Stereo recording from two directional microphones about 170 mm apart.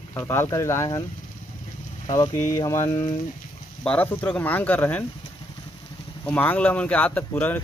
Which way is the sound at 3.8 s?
10° left (ahead or behind).